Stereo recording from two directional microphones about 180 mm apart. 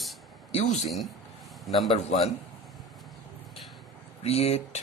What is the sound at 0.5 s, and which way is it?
Speech, 40° left (ahead or behind).